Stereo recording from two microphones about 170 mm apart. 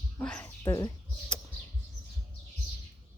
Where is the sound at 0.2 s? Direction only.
10° left (ahead or behind).